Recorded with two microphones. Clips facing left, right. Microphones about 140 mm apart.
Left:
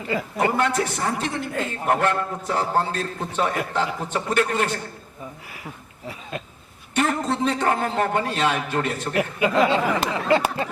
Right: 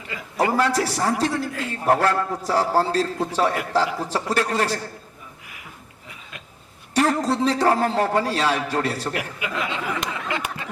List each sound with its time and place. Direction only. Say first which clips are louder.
0.1 s speech: left 10 dB; 30° left (ahead or behind)
0.5 s a man's voice: right 1 dB; 35° right (ahead or behind)
6.3 s a sound: left 13 dB; 35° left (ahead or behind)
6.9 s a man's voice: right 2 dB; 35° right (ahead or behind)
9.1 s speech: left 8 dB; 35° left (ahead or behind)